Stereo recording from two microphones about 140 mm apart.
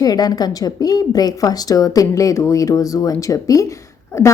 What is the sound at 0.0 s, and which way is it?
A woman's voice, 25° left (ahead or behind).